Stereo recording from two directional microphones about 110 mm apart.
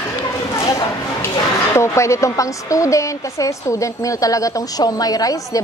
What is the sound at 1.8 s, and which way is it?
A woman's voice, 25° left (ahead or behind).